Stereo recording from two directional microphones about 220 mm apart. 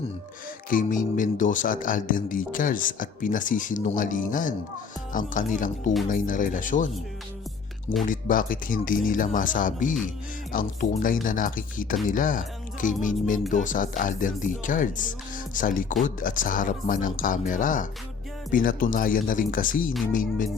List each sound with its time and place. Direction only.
0.7 s speech: 35° left (ahead or behind)
8.0 s speech: 40° left (ahead or behind)